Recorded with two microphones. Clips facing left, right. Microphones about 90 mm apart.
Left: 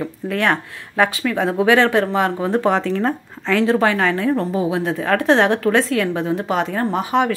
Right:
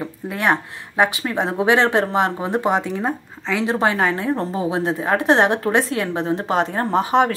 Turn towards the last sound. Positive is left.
turn(degrees=-30)  # may be behind; listen again after turning